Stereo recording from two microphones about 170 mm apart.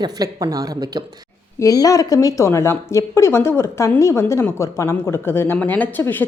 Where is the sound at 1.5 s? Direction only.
20° left (ahead or behind).